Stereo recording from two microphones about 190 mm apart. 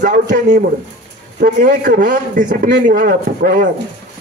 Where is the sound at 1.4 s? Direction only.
45° right (ahead or behind).